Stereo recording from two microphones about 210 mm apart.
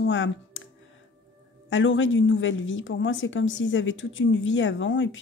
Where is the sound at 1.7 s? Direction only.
65° left (ahead or behind).